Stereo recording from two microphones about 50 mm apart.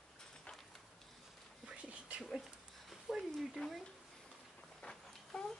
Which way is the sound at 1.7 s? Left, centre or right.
Right.